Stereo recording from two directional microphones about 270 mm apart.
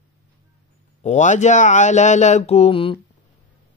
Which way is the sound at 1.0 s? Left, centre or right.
Left.